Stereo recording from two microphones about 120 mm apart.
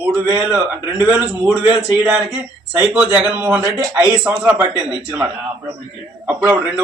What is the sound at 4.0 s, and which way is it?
A man's voice, 15° right (ahead or behind).